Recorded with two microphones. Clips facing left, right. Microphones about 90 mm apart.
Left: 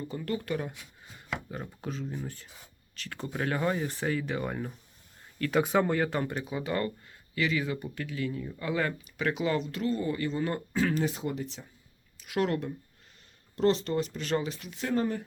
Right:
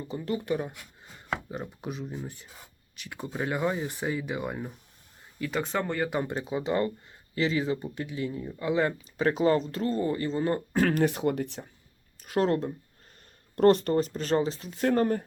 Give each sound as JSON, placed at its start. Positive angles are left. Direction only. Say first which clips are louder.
{"t": 0.0, "sound": "speech", "louder": "right 2 dB", "side_deg": -20}
{"t": 5.5, "sound": "speech", "louder": "left 4 dB", "side_deg": 5}
{"t": 6.2, "sound": "speech", "louder": "right 3 dB", "side_deg": -25}
{"t": 9.2, "sound": "speech", "louder": "right 5 dB", "side_deg": -35}
{"t": 10.8, "sound": "speech", "louder": "right 3 dB", "side_deg": -60}
{"t": 12.2, "sound": "speech", "louder": "right 3 dB", "side_deg": -35}
{"t": 13.6, "sound": "speech", "louder": "right 5 dB", "side_deg": -55}
{"t": 14.8, "sound": "speech", "louder": "right 5 dB", "side_deg": -50}